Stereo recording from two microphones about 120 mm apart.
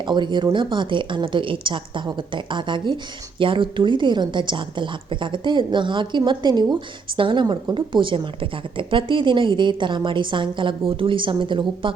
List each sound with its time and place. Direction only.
0.1 s a woman's voice: 40° right (ahead or behind)